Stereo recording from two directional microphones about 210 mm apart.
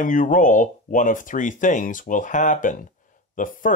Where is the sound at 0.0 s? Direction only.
40° left (ahead or behind).